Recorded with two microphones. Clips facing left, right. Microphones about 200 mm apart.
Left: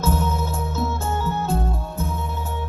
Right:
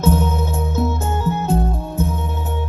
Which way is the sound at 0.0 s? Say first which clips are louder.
Right 5 dB; 15° right (ahead or behind).